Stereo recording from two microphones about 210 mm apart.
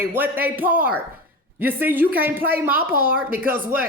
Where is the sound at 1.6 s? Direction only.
10° right (ahead or behind).